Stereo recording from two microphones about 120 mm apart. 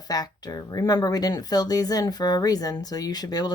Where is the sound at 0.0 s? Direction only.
30° left (ahead or behind).